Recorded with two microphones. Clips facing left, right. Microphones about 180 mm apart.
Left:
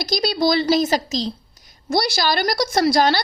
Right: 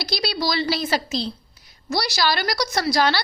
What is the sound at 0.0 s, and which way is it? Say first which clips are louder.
A woman's voice: left 5 dB; 45° left (ahead or behind).